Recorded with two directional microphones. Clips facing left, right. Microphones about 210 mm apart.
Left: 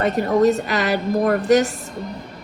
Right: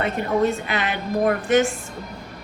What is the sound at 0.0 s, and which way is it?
A woman's voice, 40° left (ahead or behind).